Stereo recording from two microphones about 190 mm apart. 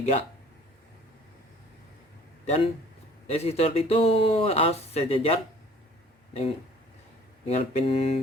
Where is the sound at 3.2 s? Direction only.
35° left (ahead or behind).